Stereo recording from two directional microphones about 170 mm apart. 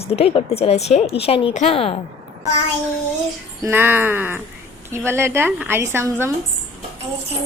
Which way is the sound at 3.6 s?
10° right (ahead or behind).